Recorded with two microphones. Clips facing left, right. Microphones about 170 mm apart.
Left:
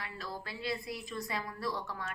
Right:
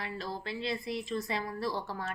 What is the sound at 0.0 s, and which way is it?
A woman's voice, 25° right (ahead or behind).